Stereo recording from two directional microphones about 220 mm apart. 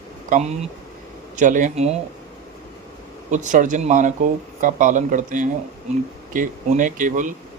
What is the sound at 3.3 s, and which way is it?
Speech, 35° right (ahead or behind).